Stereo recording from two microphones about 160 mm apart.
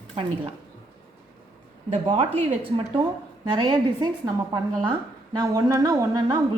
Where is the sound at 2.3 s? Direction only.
40° right (ahead or behind).